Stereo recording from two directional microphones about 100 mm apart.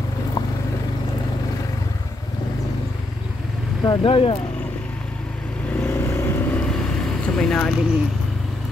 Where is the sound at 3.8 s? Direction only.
55° left (ahead or behind).